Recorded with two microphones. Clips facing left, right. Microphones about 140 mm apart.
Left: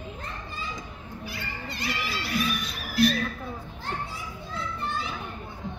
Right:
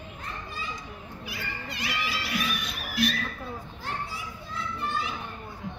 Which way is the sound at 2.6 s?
35° left (ahead or behind).